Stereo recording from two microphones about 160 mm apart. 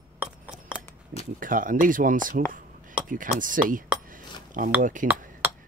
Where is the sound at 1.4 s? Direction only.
55° right (ahead or behind).